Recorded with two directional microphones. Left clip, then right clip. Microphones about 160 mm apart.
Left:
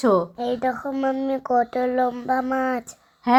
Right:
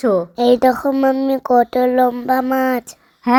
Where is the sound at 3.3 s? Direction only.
40° right (ahead or behind).